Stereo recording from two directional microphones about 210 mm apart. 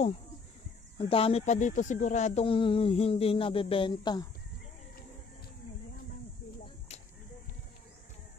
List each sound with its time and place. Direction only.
0.9 s speech: 25° left (ahead or behind)